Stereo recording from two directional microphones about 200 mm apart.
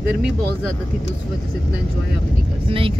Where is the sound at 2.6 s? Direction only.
25° right (ahead or behind).